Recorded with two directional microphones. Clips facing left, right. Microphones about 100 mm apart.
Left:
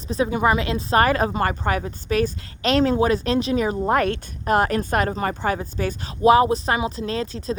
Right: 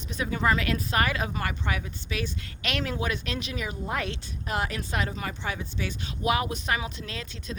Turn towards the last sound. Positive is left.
turn(degrees=35)  # may be behind; listen again after turning